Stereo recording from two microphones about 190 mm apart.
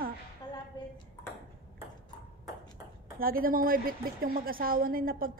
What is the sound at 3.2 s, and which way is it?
A woman's voice, 50° right (ahead or behind).